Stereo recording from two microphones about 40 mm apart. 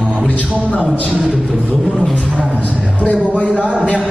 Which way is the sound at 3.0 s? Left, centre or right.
Left.